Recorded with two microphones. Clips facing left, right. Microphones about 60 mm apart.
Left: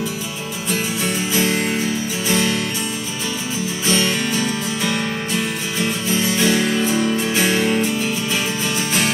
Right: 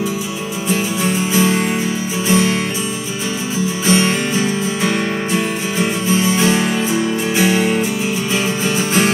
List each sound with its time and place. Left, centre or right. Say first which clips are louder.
1.0 s music: right 5 dB; right
3.8 s music: right 4 dB; right
8.6 s music: right 6 dB; right